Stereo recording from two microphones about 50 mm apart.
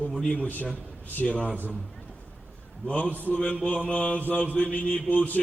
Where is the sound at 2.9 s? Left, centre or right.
Centre.